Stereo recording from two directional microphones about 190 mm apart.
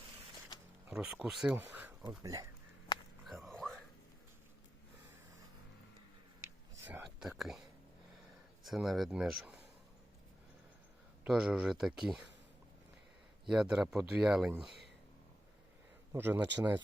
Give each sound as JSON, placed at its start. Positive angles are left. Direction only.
{"t": 0.9, "sound": "speech", "side_deg": -5}
{"t": 1.5, "sound": "a sound", "side_deg": -10}
{"t": 2.0, "sound": "speech", "side_deg": -20}
{"t": 3.2, "sound": "a sound", "side_deg": 0}
{"t": 6.8, "sound": "whispering", "side_deg": -5}
{"t": 8.6, "sound": "speech", "side_deg": 0}
{"t": 11.2, "sound": "speech", "side_deg": -5}
{"t": 13.4, "sound": "speech", "side_deg": -5}
{"t": 16.1, "sound": "speech", "side_deg": -10}